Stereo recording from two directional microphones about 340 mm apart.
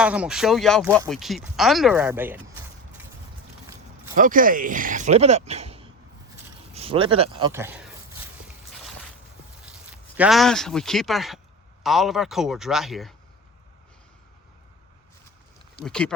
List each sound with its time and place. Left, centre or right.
0.0 s speech: centre
4.1 s speech: right; by 7.9 s centre
9.6 s speech: centre
15.8 s speech: centre